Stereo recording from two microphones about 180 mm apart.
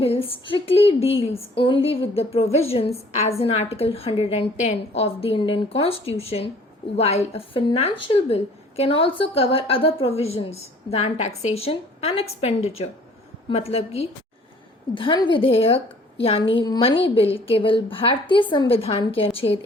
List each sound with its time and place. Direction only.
0.0 s a woman's voice: 30° left (ahead or behind)